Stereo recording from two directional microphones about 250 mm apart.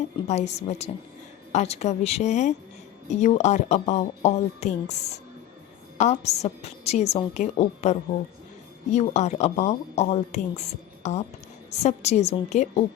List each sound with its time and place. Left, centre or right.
0.3 s speech: left